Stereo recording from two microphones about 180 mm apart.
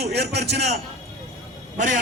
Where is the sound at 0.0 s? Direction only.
65° right (ahead or behind).